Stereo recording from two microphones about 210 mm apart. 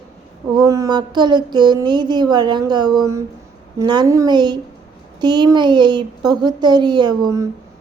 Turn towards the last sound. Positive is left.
turn(degrees=-20)  # may be behind; listen again after turning